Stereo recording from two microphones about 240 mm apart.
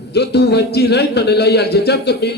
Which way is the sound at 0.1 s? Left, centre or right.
Left.